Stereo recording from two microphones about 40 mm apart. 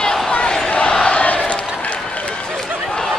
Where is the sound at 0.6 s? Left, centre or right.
Centre.